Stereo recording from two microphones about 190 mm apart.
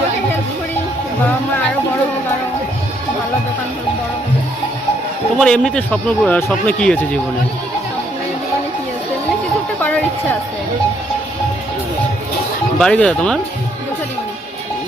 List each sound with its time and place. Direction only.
5.4 s speech: 5° left (ahead or behind)
12.8 s speech: 5° left (ahead or behind)